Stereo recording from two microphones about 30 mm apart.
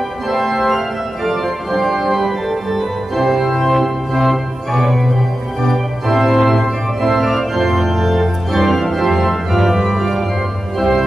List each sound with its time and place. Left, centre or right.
0.3 s organ: centre